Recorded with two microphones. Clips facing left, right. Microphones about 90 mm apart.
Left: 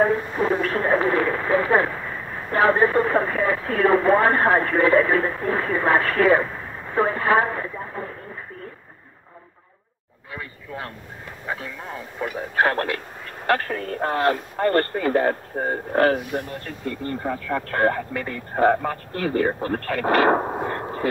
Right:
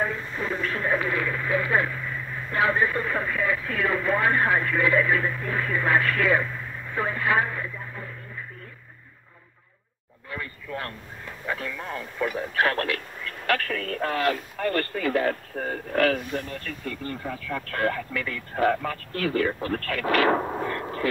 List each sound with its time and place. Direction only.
0.0 s speech: 35° left (ahead or behind)
10.3 s vehicle: 10° left (ahead or behind)
11.4 s speech: 15° left (ahead or behind)
12.4 s speech: 30° left (ahead or behind)
16.2 s speech: 15° left (ahead or behind)
16.6 s speech: 35° left (ahead or behind)